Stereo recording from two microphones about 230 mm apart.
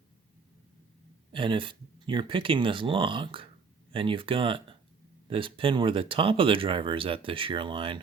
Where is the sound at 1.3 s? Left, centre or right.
Right.